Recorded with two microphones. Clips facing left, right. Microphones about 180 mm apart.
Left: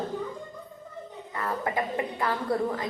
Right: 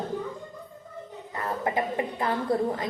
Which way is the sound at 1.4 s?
25° right (ahead or behind).